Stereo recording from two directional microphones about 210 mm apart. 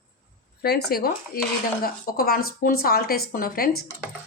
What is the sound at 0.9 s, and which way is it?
Speech, 45° left (ahead or behind).